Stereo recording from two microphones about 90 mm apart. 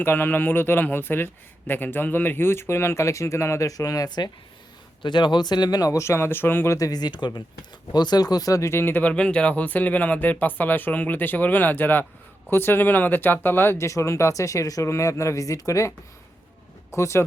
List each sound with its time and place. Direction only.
0.0 s a man's voice: 25° left (ahead or behind); by 4.3 s 50° left (ahead or behind)
5.0 s speech: 60° left (ahead or behind); by 6.7 s 25° left (ahead or behind)
6.7 s a man's voice: 45° left (ahead or behind)
16.9 s speech: 30° left (ahead or behind)